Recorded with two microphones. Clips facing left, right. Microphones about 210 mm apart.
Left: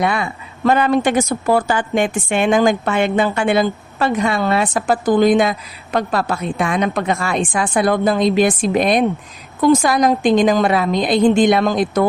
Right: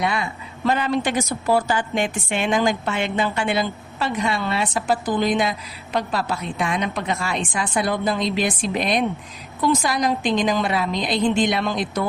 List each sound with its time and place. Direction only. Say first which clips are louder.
0.0 s a woman's voice: left 5 dB; 55° left (ahead or behind)